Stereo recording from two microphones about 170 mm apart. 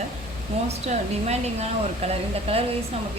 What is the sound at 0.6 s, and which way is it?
Speech, 40° right (ahead or behind).